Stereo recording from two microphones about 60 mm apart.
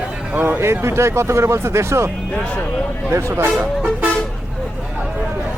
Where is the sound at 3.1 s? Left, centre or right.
Right.